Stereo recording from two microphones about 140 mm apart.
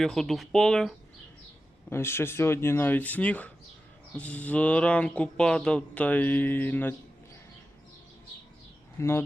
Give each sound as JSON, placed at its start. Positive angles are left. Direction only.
{"t": 0.0, "sound": "speech", "side_deg": 0}
{"t": 1.9, "sound": "speech", "side_deg": 15}
{"t": 9.0, "sound": "speech", "side_deg": 20}